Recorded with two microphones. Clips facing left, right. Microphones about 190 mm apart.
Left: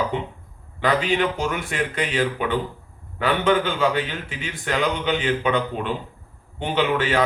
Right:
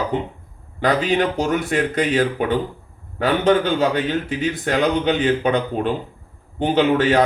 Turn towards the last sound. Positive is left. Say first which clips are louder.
# right 5 dB
turn(degrees=-40)  # may be behind; listen again after turning